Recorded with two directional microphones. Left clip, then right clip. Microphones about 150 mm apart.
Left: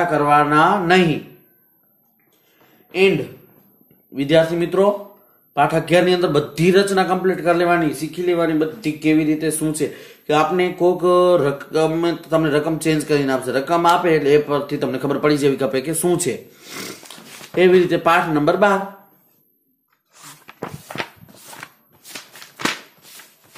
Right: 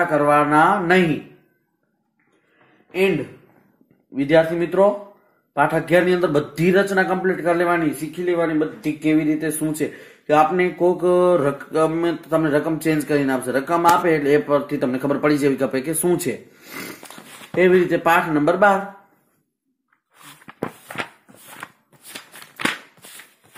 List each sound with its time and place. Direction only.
0.0 s speech: 30° right (ahead or behind)
4.1 s speech: 25° right (ahead or behind)
20.4 s walk: 15° right (ahead or behind)